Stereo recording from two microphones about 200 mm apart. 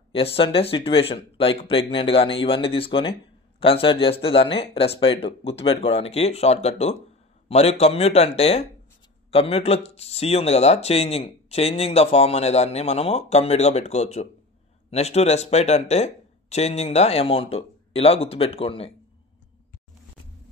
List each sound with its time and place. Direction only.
0.1 s speech: 25° left (ahead or behind)